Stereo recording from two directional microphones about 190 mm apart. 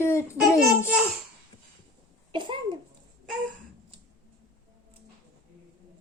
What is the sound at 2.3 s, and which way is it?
Speech, 25° right (ahead or behind).